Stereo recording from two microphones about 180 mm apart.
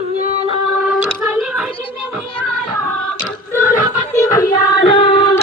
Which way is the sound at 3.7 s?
45° left (ahead or behind).